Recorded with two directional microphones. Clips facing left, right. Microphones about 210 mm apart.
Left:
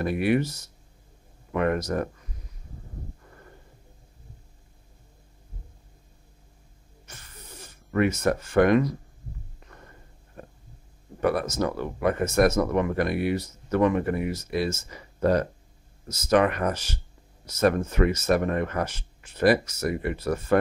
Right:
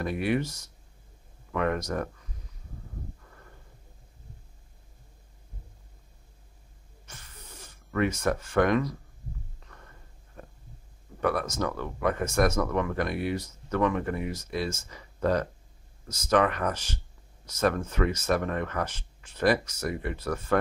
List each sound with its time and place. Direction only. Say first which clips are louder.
0.0 s speech: left 4 dB; 5° left (ahead or behind)
7.6 s snort: left 4 dB; 5° left (ahead or behind)
8.3 s speech: left 5 dB; 10° left (ahead or behind)
11.1 s speech: left 3 dB; 5° left (ahead or behind)
16.1 s speech: left 3 dB; 10° left (ahead or behind)